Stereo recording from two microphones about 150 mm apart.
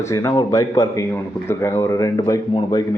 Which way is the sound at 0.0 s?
20° left (ahead or behind).